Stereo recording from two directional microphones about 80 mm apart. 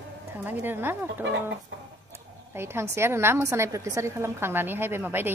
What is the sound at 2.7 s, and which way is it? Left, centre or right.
A woman's voice, right.